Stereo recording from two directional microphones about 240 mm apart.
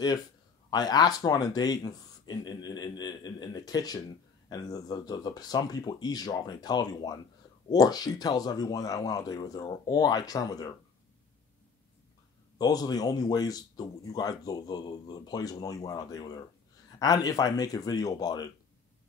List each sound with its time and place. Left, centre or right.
0.7 s speech: centre
12.5 s speech: centre